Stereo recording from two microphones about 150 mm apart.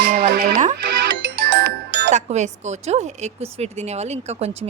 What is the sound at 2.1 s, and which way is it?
A woman's voice, 50° right (ahead or behind).